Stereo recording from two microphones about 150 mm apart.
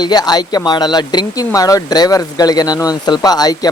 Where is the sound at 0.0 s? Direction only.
25° left (ahead or behind).